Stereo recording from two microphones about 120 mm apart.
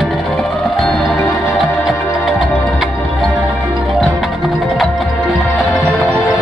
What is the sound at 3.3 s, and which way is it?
Music, 10° right (ahead or behind).